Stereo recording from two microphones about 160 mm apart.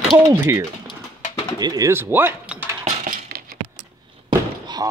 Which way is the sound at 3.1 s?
65° right (ahead or behind).